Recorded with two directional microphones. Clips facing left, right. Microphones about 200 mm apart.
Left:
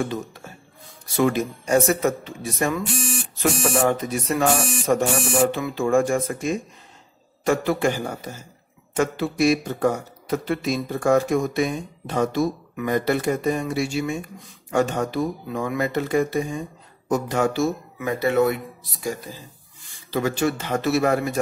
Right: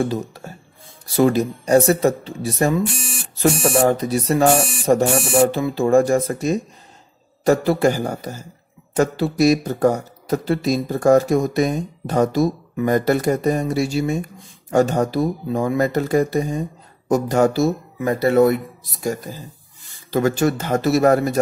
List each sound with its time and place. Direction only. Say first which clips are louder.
0.0 s speech: right 5 dB; 35° right (ahead or behind)
20.1 s a man's voice: right 4 dB; 45° right (ahead or behind)